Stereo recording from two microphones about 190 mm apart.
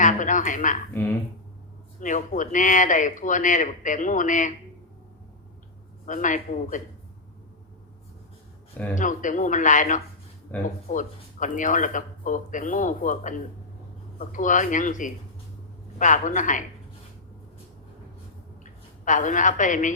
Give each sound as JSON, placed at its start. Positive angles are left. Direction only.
{"t": 0.0, "sound": "speech", "side_deg": 40}
{"t": 2.0, "sound": "a man's voice", "side_deg": 40}
{"t": 6.1, "sound": "a man's voice", "side_deg": 40}
{"t": 9.0, "sound": "a man's voice", "side_deg": 40}
{"t": 10.5, "sound": "speech", "side_deg": 10}
{"t": 10.8, "sound": "a man's voice", "side_deg": 40}
{"t": 18.6, "sound": "a woman's voice", "side_deg": 40}